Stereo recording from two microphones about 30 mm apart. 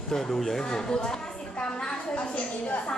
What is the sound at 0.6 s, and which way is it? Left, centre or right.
A woman's voice, left.